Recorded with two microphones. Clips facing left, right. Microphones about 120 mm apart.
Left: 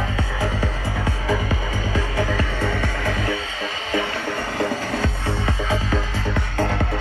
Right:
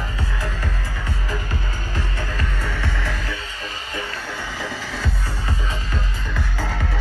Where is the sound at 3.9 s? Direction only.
75° left (ahead or behind).